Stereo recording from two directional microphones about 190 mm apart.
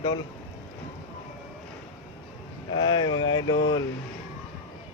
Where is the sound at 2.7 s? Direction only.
25° left (ahead or behind).